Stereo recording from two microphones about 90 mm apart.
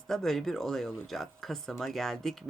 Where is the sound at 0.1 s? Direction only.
5° left (ahead or behind).